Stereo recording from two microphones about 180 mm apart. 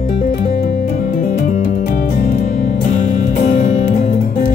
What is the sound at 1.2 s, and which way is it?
Music, 45° left (ahead or behind).